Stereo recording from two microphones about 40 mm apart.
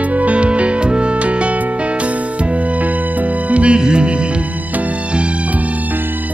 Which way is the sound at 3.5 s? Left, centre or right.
Right.